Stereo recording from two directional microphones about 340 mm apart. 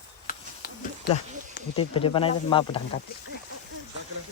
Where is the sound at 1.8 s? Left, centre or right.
Centre.